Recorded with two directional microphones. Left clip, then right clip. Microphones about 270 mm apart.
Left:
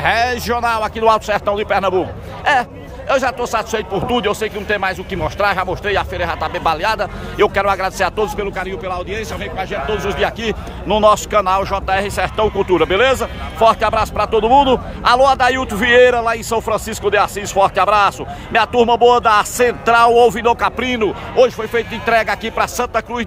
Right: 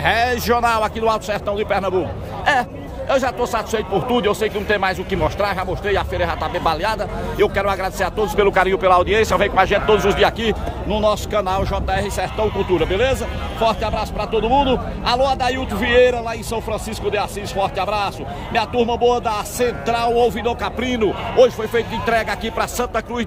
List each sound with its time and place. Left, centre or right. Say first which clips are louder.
0.0 s speech: left 2 dB; centre
8.5 s speech: right 8 dB; centre
10.9 s speech: left 7 dB; centre